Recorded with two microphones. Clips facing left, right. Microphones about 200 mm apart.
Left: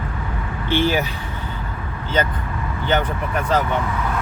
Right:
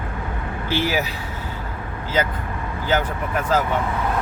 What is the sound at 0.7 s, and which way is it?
Speech, 5° right (ahead or behind).